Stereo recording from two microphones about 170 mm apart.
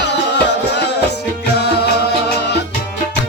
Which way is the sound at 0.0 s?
90° left.